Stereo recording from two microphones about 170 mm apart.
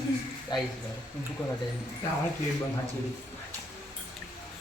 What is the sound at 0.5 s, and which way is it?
Speech, 25° left (ahead or behind).